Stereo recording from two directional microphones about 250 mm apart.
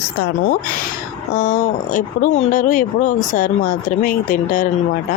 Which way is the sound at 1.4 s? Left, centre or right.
Left.